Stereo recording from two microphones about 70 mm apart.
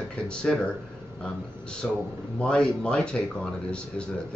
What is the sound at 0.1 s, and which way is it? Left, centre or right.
Speech, centre.